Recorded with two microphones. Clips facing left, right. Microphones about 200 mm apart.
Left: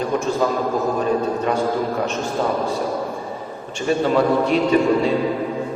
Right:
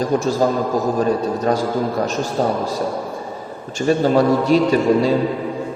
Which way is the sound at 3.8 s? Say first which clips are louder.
Right 3 dB; 40° right (ahead or behind).